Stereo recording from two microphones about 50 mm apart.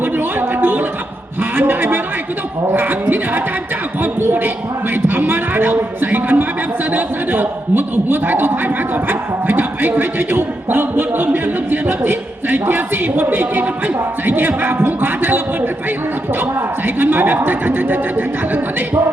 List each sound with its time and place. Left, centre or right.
0.0 s music: right
1.5 s a man's voice: right
16.8 s a man's voice: right